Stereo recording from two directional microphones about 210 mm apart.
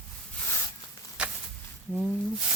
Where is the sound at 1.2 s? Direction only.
5° right (ahead or behind).